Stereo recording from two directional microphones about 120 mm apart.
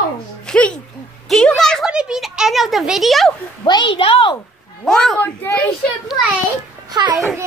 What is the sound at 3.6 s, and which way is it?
Speech, 40° left (ahead or behind).